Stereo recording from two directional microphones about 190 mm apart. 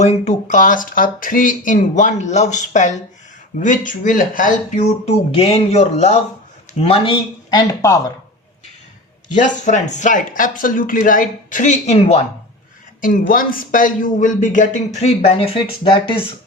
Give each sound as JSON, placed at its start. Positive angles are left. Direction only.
{"t": 0.0, "sound": "speech", "side_deg": 35}
{"t": 9.3, "sound": "speech", "side_deg": 40}
{"t": 13.0, "sound": "speech", "side_deg": 45}